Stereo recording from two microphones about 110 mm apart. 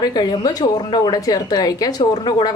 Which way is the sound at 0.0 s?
40° left (ahead or behind).